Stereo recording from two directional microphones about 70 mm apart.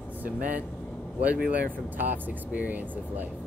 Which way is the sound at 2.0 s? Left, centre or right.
Right.